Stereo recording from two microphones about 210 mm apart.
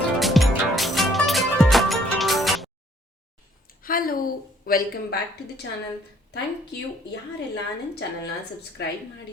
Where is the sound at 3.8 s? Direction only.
45° left (ahead or behind).